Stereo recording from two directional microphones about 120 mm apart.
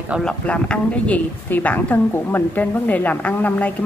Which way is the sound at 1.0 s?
10° left (ahead or behind).